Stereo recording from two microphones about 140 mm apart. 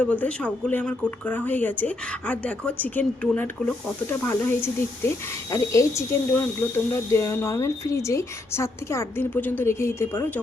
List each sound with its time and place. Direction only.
0.0 s a woman's voice: 10° left (ahead or behind)